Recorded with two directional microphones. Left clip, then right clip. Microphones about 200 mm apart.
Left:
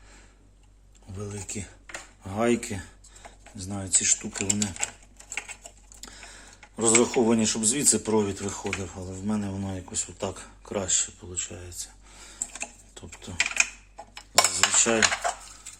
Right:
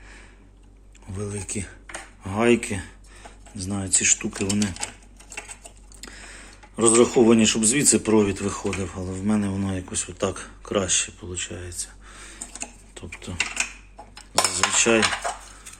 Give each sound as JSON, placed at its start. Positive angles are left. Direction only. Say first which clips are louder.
{"t": 1.1, "sound": "speech", "louder": "right 5 dB", "side_deg": 5}
{"t": 3.5, "sound": "speech", "louder": "right 3 dB", "side_deg": 0}
{"t": 6.0, "sound": "speech", "louder": "right 4 dB", "side_deg": 0}
{"t": 12.9, "sound": "typing", "louder": "right 6 dB", "side_deg": 5}
{"t": 14.3, "sound": "cutlery", "louder": "right 1 dB", "side_deg": 5}